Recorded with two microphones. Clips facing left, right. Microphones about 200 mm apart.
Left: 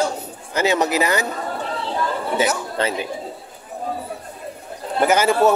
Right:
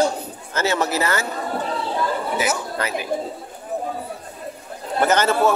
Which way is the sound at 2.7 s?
25° left (ahead or behind).